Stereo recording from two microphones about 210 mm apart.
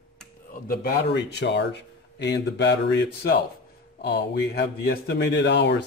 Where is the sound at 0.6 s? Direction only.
45° left (ahead or behind).